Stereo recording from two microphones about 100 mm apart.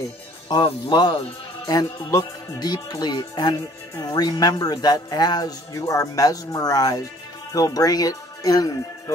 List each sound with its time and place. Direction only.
0.5 s music: 45° left (ahead or behind)
1.7 s music: 35° left (ahead or behind)
4.0 s speech: 40° left (ahead or behind)